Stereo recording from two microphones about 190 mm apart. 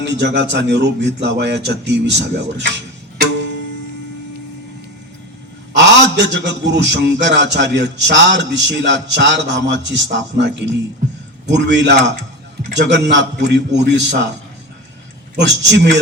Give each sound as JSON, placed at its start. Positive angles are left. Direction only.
{"t": 0.0, "sound": "a man's voice", "side_deg": -65}
{"t": 5.7, "sound": "a man's voice", "side_deg": -65}
{"t": 15.4, "sound": "a man's voice", "side_deg": -65}